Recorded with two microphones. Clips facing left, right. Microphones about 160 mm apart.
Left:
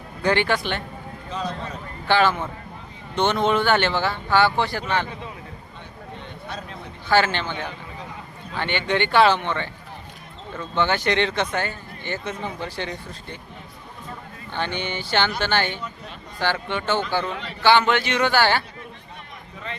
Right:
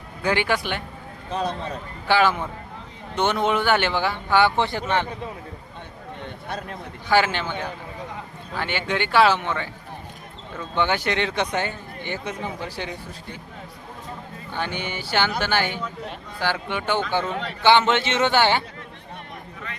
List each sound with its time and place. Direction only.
0.2 s speech: 10° right (ahead or behind)
1.3 s a man's voice: 55° right (ahead or behind)
2.0 s speech: 10° right (ahead or behind)
7.1 s speech: 10° right (ahead or behind)
10.8 s speech: 10° right (ahead or behind)
11.5 s speech: 20° right (ahead or behind)
14.5 s speech: 10° right (ahead or behind)